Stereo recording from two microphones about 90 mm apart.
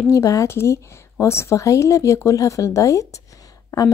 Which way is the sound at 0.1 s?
35° left (ahead or behind).